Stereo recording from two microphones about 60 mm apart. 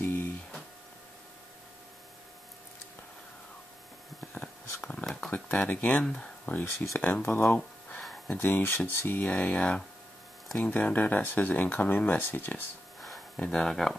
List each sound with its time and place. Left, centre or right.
0.0 s a sound: left
4.3 s a sound: left
4.8 s speech: centre
5.3 s speech: left
6.4 s speech: left
7.2 s speech: left
13.4 s speech: centre